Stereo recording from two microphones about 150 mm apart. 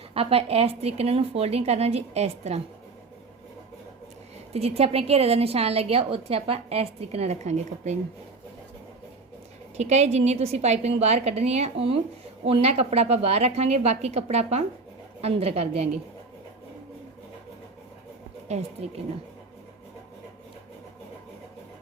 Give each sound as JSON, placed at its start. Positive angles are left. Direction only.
{"t": 0.1, "sound": "a woman's voice", "side_deg": -40}
{"t": 4.5, "sound": "a woman's voice", "side_deg": -45}
{"t": 9.7, "sound": "a woman's voice", "side_deg": -50}
{"t": 18.4, "sound": "a woman's voice", "side_deg": -45}